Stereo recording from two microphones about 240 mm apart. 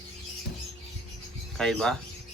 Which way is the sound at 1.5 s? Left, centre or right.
Centre.